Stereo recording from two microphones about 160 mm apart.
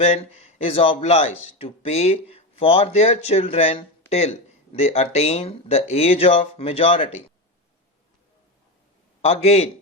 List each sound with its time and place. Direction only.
0.0 s a man's voice: 40° left (ahead or behind)
9.2 s a man's voice: 40° left (ahead or behind)